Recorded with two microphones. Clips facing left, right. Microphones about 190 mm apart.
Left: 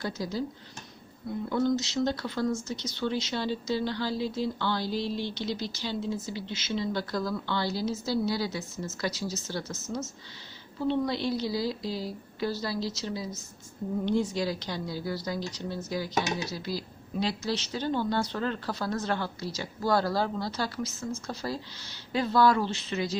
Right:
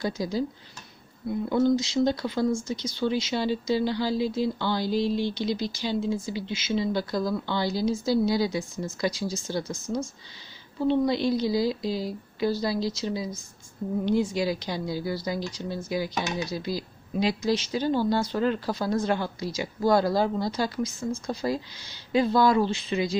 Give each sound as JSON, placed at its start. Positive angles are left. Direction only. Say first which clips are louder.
{"t": 0.0, "sound": "speech", "louder": "right 4 dB", "side_deg": -10}
{"t": 1.5, "sound": "speech", "louder": "right 4 dB", "side_deg": -15}